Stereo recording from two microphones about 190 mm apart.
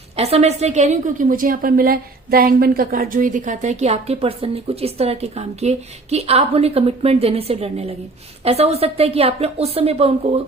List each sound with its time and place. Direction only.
0.2 s a woman's voice: 35° right (ahead or behind)